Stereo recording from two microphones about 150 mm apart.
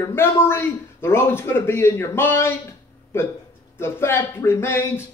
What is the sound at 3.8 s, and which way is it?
Speech, 15° left (ahead or behind).